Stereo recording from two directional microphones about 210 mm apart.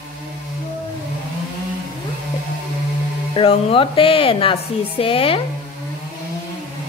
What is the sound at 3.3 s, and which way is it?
Speech, 25° left (ahead or behind).